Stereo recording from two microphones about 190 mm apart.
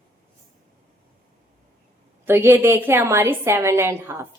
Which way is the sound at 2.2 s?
10° right (ahead or behind).